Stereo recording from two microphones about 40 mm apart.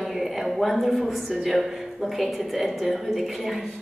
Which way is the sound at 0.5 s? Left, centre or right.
Centre.